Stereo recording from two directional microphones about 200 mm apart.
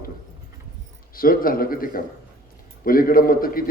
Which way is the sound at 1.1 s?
45° left (ahead or behind).